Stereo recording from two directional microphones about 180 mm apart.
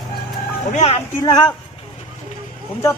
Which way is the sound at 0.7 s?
35° left (ahead or behind).